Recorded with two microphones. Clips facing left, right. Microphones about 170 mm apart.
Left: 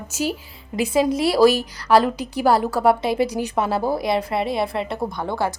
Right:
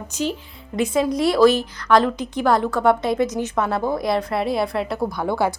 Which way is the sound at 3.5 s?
30° left (ahead or behind).